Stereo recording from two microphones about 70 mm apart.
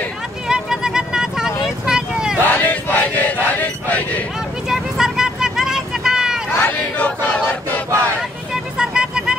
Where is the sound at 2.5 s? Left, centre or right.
Left.